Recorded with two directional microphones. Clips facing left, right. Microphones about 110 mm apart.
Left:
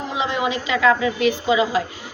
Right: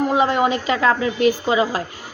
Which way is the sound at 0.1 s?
45° right (ahead or behind).